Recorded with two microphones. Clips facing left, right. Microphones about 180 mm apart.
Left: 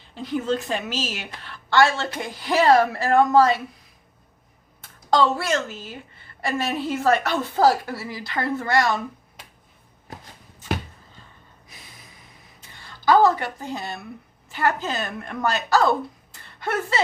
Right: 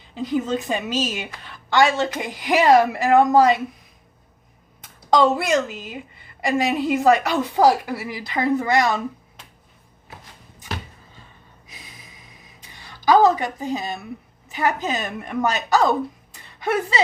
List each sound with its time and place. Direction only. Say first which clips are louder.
0.1 s a woman's voice: right 2 dB; 15° right (ahead or behind)
4.8 s a woman's voice: right 3 dB; 15° right (ahead or behind)
12.6 s a sound: right 1 dB; 15° right (ahead or behind)
13.4 s a woman's voice: right 4 dB; 15° right (ahead or behind)